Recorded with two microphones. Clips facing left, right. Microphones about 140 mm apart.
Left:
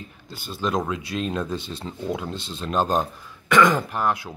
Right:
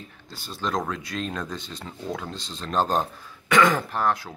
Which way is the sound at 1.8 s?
25° left (ahead or behind).